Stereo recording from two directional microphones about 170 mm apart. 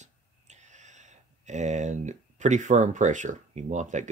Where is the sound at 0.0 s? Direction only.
45° right (ahead or behind).